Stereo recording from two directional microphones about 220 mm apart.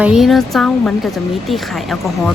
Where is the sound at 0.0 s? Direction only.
Centre (ahead or behind).